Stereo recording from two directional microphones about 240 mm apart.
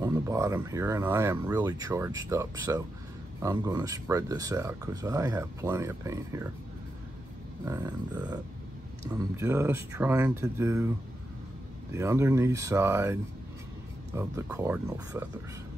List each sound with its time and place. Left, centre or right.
0.0 s speech: centre
7.6 s speech: centre
11.9 s speech: centre